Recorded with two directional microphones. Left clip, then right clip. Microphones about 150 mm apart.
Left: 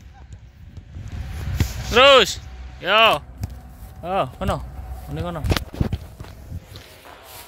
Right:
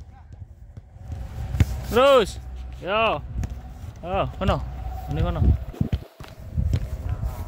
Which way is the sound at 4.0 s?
25° left (ahead or behind).